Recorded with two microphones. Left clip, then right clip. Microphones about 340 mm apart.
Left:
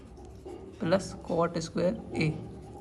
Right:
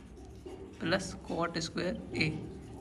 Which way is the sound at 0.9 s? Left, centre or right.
Centre.